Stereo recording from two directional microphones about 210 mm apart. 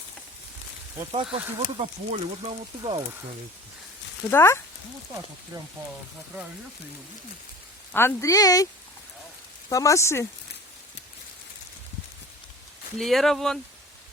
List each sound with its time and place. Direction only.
1.1 s speech: 25° right (ahead or behind)
4.3 s speech: 10° left (ahead or behind)
7.9 s speech: 15° left (ahead or behind)
9.6 s speech: 15° left (ahead or behind)
13.0 s speech: centre (ahead or behind)